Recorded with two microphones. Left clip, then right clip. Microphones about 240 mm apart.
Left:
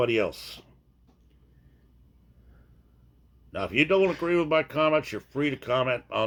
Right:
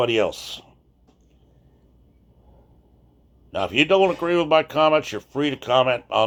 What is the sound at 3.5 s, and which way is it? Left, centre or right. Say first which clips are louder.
Speech: right 5 dB; left.